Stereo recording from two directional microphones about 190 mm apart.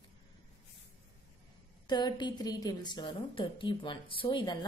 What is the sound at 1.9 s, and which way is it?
Speech, 20° left (ahead or behind).